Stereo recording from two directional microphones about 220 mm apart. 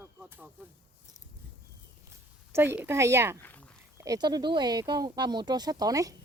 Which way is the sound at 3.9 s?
15° right (ahead or behind).